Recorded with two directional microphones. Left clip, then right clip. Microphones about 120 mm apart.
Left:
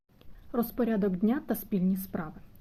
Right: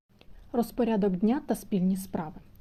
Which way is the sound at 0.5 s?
15° right (ahead or behind).